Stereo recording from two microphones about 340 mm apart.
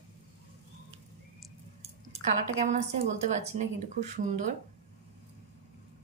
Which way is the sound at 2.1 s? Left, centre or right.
Centre.